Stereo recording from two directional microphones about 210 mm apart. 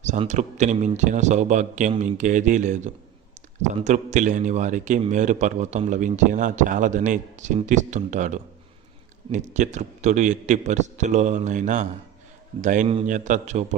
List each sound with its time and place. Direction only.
0.0 s a man's voice: 35° right (ahead or behind)